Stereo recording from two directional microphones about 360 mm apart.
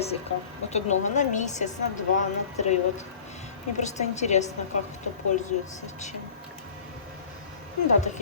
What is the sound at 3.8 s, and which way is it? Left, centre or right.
Speech, centre.